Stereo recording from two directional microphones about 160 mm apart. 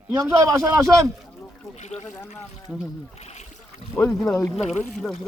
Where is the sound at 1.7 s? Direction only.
45° left (ahead or behind).